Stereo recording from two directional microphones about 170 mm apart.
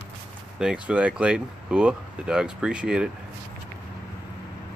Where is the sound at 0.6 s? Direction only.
5° right (ahead or behind).